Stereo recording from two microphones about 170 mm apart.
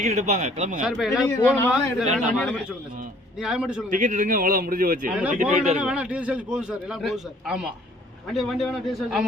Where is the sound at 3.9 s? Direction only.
50° right (ahead or behind).